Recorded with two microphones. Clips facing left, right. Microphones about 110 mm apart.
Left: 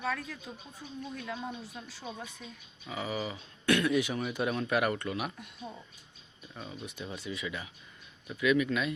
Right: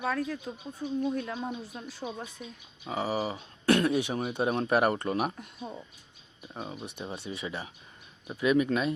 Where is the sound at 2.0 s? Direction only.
65° right (ahead or behind).